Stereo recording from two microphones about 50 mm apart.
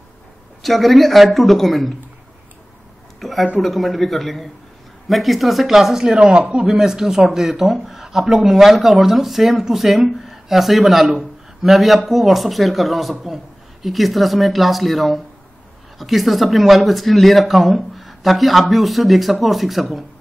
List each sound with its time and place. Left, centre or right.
0.6 s speech: centre
3.2 s a sound: centre
3.6 s speech: centre
6.1 s a man's voice: right; by 20.1 s centre